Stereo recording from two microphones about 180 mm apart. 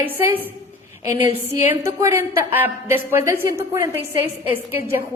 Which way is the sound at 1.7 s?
15° right (ahead or behind).